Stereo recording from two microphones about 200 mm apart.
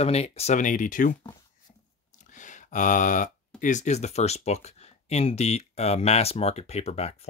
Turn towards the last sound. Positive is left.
turn(degrees=30)  # may be behind; listen again after turning